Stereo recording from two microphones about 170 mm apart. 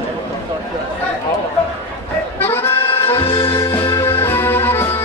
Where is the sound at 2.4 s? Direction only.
15° left (ahead or behind).